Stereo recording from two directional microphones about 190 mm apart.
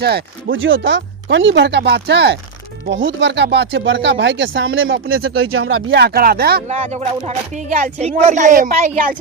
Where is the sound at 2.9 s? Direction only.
75° right (ahead or behind).